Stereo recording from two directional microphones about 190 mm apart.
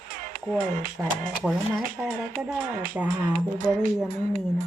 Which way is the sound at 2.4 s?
5° right (ahead or behind).